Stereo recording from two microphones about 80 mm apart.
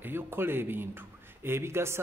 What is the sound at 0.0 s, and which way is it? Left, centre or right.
A man's voice, right.